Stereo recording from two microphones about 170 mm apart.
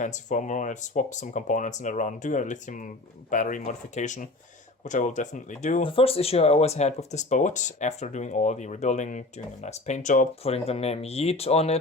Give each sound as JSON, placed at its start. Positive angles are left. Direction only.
{"t": 0.0, "sound": "speech", "side_deg": 45}
{"t": 5.8, "sound": "speech", "side_deg": 35}